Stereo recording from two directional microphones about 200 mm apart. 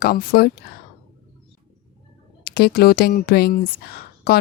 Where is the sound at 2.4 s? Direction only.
50° left (ahead or behind).